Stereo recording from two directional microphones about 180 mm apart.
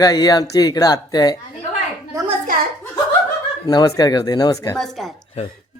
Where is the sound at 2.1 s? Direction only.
15° right (ahead or behind).